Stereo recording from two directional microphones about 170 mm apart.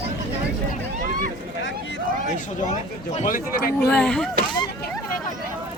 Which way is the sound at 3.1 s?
45° left (ahead or behind).